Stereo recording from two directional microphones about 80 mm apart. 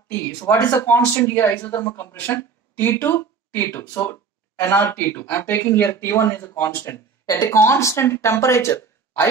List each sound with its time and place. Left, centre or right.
0.5 s a man's voice: left